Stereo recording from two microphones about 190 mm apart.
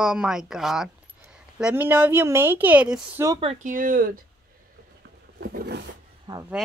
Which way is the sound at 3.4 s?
30° right (ahead or behind).